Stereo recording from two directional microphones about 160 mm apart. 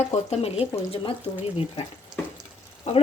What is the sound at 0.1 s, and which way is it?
Speech, 40° left (ahead or behind).